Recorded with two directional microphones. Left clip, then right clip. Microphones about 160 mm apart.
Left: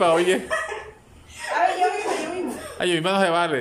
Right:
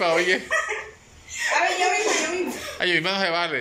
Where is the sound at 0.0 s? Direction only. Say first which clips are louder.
Left 2 dB; 15° left (ahead or behind).